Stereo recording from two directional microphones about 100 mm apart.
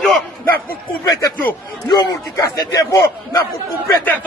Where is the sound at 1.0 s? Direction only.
35° left (ahead or behind).